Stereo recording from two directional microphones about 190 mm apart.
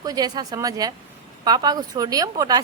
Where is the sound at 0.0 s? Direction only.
20° right (ahead or behind).